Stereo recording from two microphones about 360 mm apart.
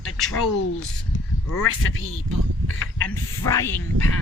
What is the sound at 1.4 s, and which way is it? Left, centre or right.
Speech, left.